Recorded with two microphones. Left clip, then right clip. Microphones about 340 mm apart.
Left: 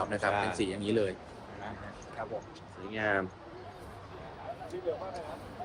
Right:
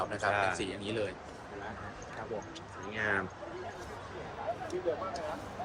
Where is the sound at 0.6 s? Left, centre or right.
Left.